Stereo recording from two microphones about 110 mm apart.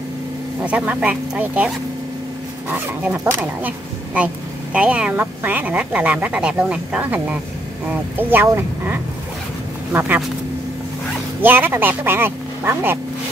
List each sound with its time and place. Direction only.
0.7 s speech: 10° right (ahead or behind)
3.0 s speech: 15° right (ahead or behind)
11.4 s speech: 20° right (ahead or behind)